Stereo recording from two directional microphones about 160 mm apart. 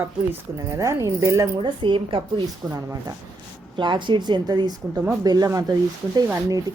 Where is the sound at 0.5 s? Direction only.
20° right (ahead or behind).